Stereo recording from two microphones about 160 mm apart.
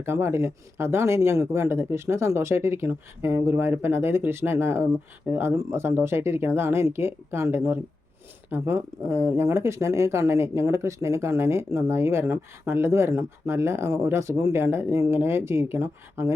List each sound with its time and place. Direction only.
0.0 s speech: 15° right (ahead or behind)